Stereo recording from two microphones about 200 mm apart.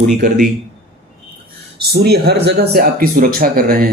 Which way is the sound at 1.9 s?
55° right (ahead or behind).